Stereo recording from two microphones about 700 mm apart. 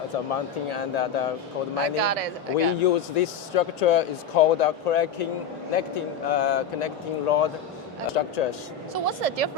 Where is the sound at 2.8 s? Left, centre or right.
Left.